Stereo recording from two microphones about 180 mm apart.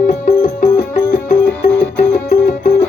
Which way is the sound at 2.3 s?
40° left (ahead or behind).